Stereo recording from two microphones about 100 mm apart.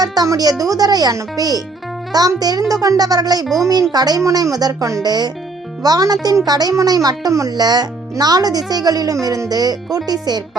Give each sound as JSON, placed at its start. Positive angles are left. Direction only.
{"t": 0.0, "sound": "speech", "side_deg": -40}